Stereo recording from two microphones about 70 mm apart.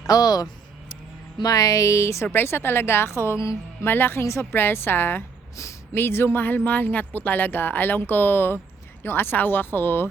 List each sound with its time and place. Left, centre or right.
0.1 s speech: left
2.2 s a woman's voice: left
3.8 s a woman's voice: left